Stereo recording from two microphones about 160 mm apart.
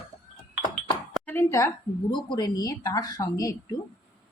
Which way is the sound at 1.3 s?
20° left (ahead or behind).